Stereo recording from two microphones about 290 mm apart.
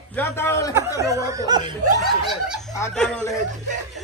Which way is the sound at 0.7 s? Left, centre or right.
Centre.